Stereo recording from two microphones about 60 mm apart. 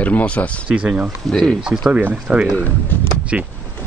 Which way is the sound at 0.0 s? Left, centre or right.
Left.